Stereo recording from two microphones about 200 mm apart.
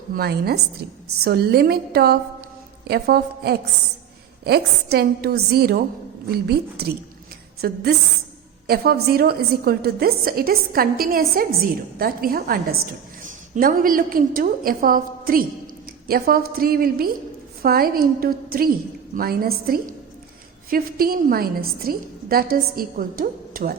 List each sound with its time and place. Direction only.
0.1 s a woman's voice: 50° right (ahead or behind)